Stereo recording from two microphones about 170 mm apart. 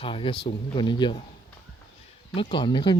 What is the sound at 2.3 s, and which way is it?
Speech, 30° left (ahead or behind).